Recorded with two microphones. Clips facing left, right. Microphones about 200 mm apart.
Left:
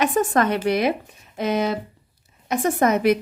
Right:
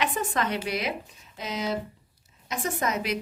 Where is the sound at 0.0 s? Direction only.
50° left (ahead or behind).